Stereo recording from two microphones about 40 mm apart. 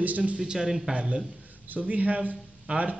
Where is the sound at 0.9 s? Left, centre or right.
Right.